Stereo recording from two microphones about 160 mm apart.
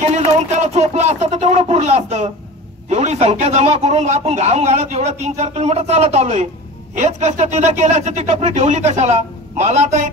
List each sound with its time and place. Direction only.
0.1 s speech: 45° right (ahead or behind)